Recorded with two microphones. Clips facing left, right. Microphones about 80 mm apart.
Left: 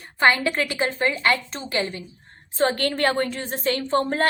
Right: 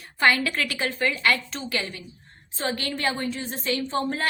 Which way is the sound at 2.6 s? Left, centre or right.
Left.